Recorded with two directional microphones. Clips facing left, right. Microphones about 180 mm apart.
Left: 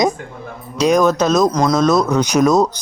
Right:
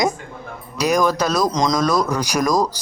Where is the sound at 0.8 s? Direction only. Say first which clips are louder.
Left 4 dB; 10° right (ahead or behind).